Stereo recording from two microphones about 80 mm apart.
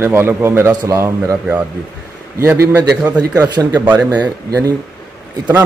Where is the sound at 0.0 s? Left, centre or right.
Right.